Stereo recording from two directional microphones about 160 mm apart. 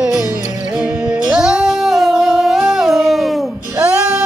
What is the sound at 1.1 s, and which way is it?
Music, 5° right (ahead or behind).